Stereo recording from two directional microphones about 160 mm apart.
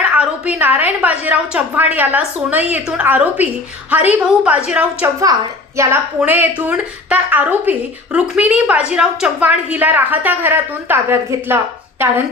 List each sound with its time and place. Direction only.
0.0 s a woman's voice: 10° right (ahead or behind)
5.7 s a woman's voice: 20° right (ahead or behind)